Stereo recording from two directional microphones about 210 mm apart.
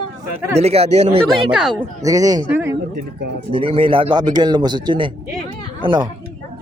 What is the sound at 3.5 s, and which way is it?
Speech, 25° right (ahead or behind).